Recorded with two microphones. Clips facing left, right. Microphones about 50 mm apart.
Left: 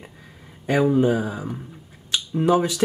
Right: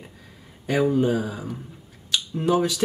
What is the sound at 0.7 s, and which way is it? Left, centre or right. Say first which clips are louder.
Speech: left 2 dB; centre.